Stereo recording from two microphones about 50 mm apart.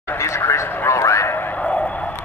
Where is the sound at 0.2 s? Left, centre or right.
Left.